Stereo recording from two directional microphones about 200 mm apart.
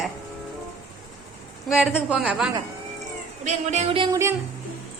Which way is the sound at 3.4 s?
35° right (ahead or behind).